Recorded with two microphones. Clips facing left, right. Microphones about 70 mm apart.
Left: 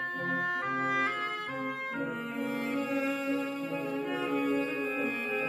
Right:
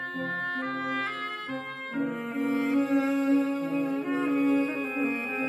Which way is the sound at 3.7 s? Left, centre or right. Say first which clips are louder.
Right 5 dB; centre.